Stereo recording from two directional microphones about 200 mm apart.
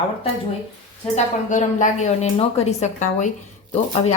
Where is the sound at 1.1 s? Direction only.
40° left (ahead or behind).